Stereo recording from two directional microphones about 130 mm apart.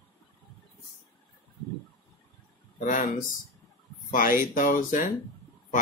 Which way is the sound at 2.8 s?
75° left (ahead or behind).